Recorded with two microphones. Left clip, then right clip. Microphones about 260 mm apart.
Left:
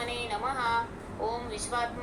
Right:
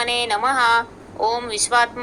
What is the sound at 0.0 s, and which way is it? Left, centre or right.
A woman's voice, right.